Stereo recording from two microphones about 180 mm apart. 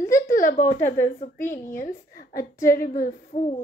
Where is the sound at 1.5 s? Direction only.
15° left (ahead or behind).